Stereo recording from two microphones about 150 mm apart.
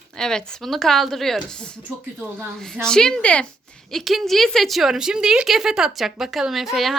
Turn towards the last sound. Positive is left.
turn(degrees=0)  # may be behind; listen again after turning